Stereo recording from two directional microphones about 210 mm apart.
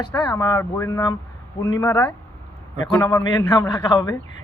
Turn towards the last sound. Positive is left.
turn(degrees=20)  # may be behind; listen again after turning